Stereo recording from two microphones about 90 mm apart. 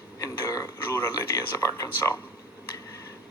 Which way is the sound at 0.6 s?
30° left (ahead or behind).